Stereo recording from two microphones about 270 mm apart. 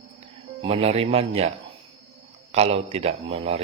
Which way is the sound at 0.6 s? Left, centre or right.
Right.